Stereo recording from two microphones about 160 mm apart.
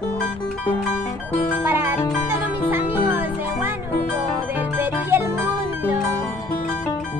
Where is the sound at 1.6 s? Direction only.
15° right (ahead or behind).